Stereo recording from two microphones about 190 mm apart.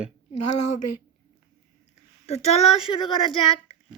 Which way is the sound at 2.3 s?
35° left (ahead or behind).